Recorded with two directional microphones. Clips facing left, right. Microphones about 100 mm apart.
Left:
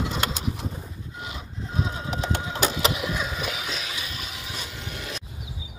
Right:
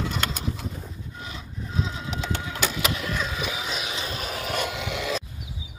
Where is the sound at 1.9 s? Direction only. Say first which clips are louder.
Left 2 dB; 30° left (ahead or behind).